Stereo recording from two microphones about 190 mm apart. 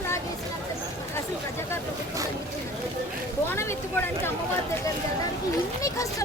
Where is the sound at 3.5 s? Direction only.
15° left (ahead or behind).